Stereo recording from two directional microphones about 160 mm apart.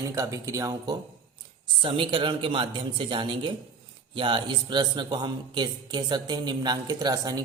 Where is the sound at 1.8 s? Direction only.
35° right (ahead or behind).